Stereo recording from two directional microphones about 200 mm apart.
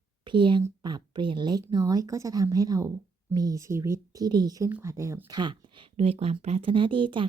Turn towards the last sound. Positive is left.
turn(degrees=-25)  # may be behind; listen again after turning